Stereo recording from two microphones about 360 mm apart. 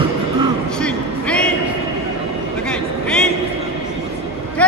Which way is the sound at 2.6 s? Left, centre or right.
Centre.